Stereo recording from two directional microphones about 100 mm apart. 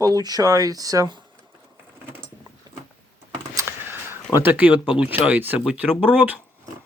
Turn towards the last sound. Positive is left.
turn(degrees=-15)  # may be behind; listen again after turning